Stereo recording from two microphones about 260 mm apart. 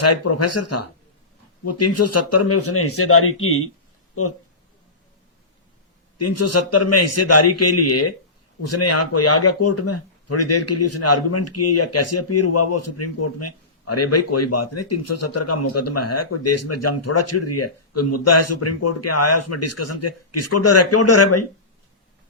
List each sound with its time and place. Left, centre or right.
0.0 s a man's voice: left
6.1 s a man's voice: left